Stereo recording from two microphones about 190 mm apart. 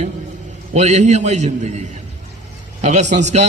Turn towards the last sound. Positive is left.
turn(degrees=-40)  # may be behind; listen again after turning